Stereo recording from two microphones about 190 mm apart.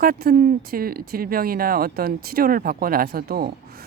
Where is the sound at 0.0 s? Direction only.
50° right (ahead or behind).